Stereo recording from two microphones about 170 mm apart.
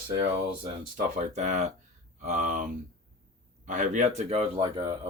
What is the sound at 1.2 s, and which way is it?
Speech, 45° right (ahead or behind).